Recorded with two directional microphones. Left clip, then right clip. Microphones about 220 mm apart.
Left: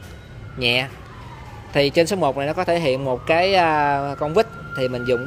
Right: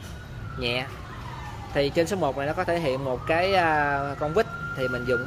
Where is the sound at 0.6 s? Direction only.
30° left (ahead or behind).